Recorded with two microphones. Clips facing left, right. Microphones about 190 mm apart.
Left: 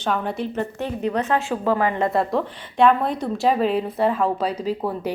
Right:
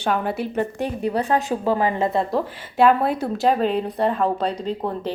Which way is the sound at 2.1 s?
5° right (ahead or behind).